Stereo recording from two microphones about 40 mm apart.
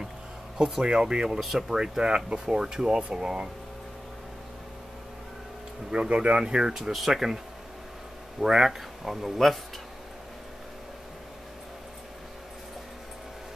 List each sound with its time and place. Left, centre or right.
0.6 s speech: centre
0.8 s speech: right
1.4 s speech: centre
1.8 s speech: centre
5.9 s speech: right
6.8 s speech: centre
8.4 s speech: centre